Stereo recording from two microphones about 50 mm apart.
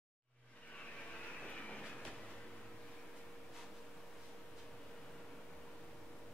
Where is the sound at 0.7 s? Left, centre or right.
Left.